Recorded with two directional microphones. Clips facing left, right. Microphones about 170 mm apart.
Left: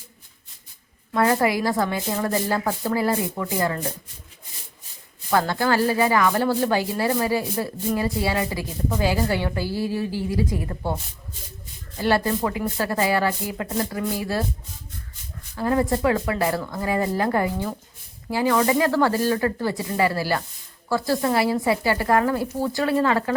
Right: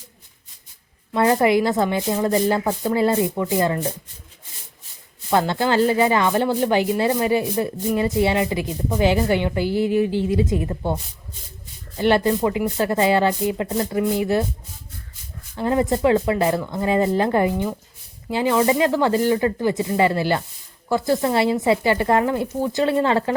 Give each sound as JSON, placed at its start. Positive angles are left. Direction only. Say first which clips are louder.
{"t": 1.1, "sound": "speech", "louder": "right 3 dB", "side_deg": -25}
{"t": 5.3, "sound": "speech", "louder": "right 2 dB", "side_deg": -20}
{"t": 15.5, "sound": "speech", "louder": "right 2 dB", "side_deg": -20}